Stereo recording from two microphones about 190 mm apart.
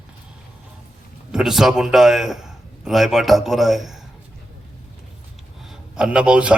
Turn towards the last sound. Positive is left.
turn(degrees=-5)  # may be behind; listen again after turning